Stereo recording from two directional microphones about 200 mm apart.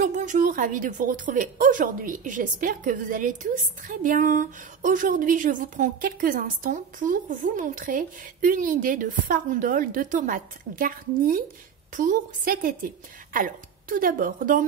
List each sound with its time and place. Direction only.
0.0 s a woman's voice: 40° right (ahead or behind)